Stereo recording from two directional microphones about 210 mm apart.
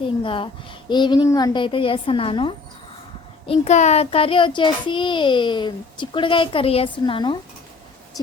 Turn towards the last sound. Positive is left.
turn(degrees=20)  # may be behind; listen again after turning